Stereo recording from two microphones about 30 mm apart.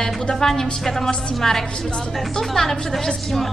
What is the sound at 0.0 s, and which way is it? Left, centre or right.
A woman's voice, centre.